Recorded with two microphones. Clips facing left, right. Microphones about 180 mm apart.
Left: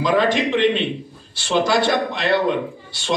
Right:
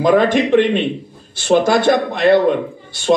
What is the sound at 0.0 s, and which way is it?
A man's voice, 50° right (ahead or behind).